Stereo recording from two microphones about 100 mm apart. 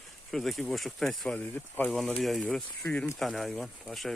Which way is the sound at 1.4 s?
15° left (ahead or behind).